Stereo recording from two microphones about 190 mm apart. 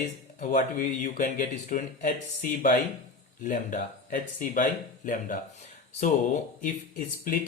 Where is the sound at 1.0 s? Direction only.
40° left (ahead or behind).